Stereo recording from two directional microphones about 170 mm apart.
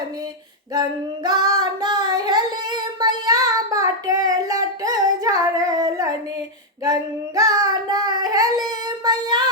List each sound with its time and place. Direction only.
0.7 s child singing: 25° right (ahead or behind)
4.8 s music: 20° right (ahead or behind)
6.8 s child singing: 20° right (ahead or behind)